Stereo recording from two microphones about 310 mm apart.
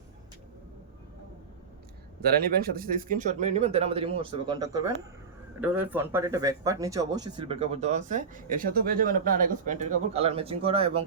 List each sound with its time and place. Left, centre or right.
2.7 s a man's voice: right